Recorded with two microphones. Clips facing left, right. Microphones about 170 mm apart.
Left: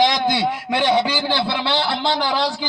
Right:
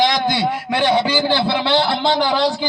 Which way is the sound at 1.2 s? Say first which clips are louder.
Right 4 dB; 45° right (ahead or behind).